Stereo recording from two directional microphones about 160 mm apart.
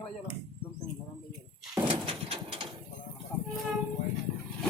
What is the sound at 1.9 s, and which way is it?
Bird, 35° right (ahead or behind).